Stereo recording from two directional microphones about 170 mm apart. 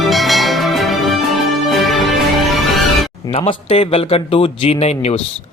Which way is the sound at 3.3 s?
30° left (ahead or behind).